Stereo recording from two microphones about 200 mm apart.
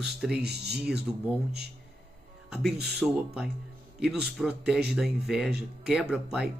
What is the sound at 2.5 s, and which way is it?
Speech, centre (ahead or behind).